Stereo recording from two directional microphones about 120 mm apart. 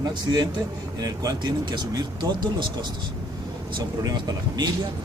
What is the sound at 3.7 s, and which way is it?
Speech, 30° right (ahead or behind).